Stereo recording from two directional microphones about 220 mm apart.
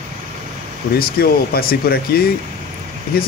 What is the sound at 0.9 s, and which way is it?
Speech, 45° left (ahead or behind).